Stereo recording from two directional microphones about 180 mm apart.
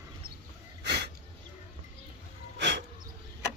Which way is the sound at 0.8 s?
70° right (ahead or behind).